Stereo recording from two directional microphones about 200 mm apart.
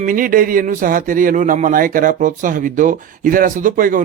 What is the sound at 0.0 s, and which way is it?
Speech, 45° right (ahead or behind).